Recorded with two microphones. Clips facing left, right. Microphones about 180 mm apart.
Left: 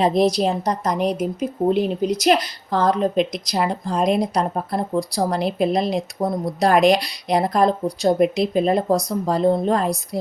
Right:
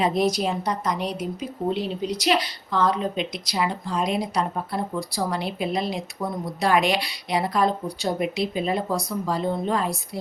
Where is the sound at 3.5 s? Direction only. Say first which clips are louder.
Left 2 dB; 40° left (ahead or behind).